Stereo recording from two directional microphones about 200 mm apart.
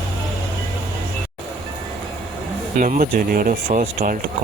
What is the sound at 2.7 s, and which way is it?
Speech, 40° right (ahead or behind).